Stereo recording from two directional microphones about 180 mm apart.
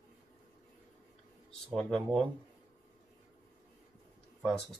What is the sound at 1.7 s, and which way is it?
Speech, centre (ahead or behind).